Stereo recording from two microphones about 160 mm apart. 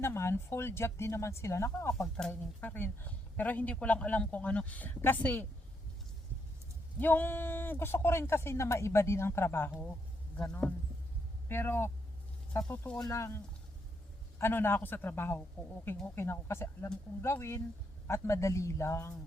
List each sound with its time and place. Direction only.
0.0 s speech: 15° left (ahead or behind)
2.0 s speech: 5° left (ahead or behind)
7.0 s speech: 10° left (ahead or behind)